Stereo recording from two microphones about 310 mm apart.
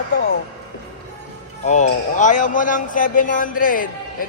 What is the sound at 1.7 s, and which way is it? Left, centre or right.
A man's voice, left.